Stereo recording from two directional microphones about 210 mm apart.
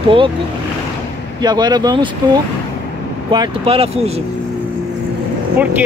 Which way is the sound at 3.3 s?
25° right (ahead or behind).